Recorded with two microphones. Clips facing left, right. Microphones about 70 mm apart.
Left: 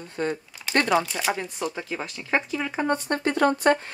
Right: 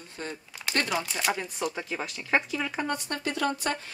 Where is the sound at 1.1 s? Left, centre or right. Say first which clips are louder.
Left 2 dB; centre.